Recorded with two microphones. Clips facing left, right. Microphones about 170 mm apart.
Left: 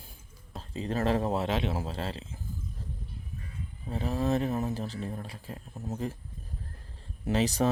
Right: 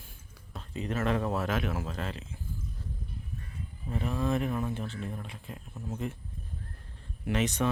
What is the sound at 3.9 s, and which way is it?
Speech, 35° left (ahead or behind).